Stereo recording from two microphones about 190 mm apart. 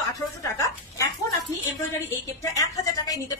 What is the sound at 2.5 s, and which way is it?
Speech, 20° left (ahead or behind).